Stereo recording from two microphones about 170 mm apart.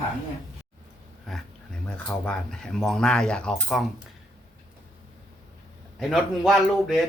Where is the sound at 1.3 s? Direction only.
Centre (ahead or behind).